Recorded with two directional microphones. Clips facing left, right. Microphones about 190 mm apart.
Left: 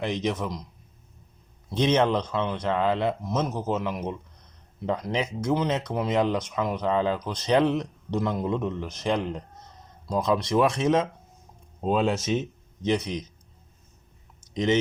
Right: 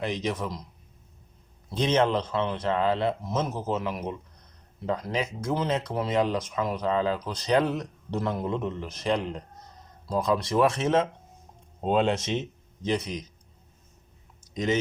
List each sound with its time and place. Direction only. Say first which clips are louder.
0.1 s a man's voice: left 2 dB; 20° left (ahead or behind)
1.7 s a man's voice: left 2 dB; 20° left (ahead or behind)
10.1 s a man's voice: left 1 dB; 20° left (ahead or behind)
12.8 s a man's voice: left 3 dB; 20° left (ahead or behind)
14.5 s speech: left 3 dB; 25° left (ahead or behind)